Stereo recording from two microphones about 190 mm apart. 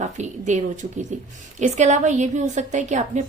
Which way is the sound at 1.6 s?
40° right (ahead or behind).